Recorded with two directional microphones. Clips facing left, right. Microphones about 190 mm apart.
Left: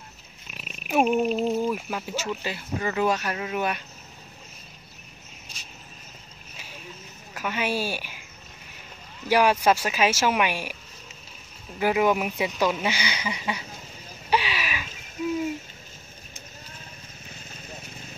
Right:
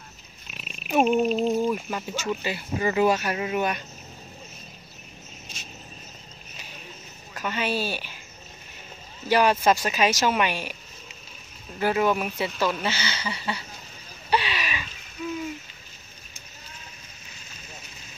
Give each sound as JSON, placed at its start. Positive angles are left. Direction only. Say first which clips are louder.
{"t": 0.6, "sound": "speech", "louder": "right 1 dB", "side_deg": 5}
{"t": 7.3, "sound": "a woman's voice", "louder": "even", "side_deg": 10}
{"t": 9.3, "sound": "speech", "louder": "even", "side_deg": 10}
{"t": 11.8, "sound": "speech", "louder": "left 1 dB", "side_deg": 15}
{"t": 14.3, "sound": "a sound", "louder": "even", "side_deg": 10}
{"t": 17.3, "sound": "vehicle", "louder": "left 5 dB", "side_deg": 55}